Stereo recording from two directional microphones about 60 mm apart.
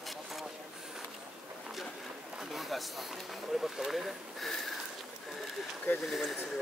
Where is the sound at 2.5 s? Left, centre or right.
Centre.